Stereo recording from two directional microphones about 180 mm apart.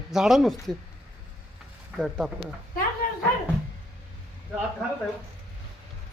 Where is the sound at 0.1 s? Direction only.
Centre (ahead or behind).